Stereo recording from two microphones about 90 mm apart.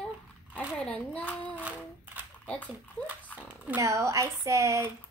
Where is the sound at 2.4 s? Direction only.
15° left (ahead or behind).